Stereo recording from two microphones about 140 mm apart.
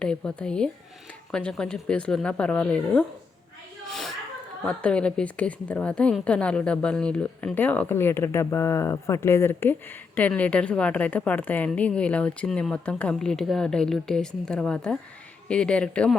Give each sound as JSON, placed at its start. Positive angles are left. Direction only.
{"t": 0.0, "sound": "a woman's voice", "side_deg": 5}
{"t": 3.8, "sound": "a sound", "side_deg": 0}
{"t": 4.6, "sound": "a woman's voice", "side_deg": 5}